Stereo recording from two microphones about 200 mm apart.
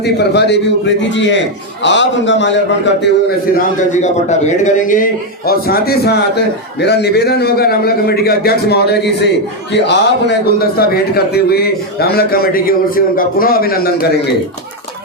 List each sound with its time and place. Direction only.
0.0 s a man's voice: 55° left (ahead or behind)
3.6 s a man's voice: 40° left (ahead or behind)